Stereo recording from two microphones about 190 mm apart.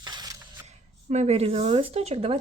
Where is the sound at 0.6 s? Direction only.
35° right (ahead or behind).